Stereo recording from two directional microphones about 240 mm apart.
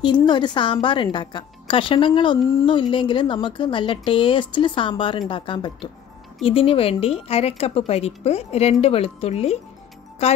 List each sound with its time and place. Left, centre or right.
0.0 s a woman's voice: centre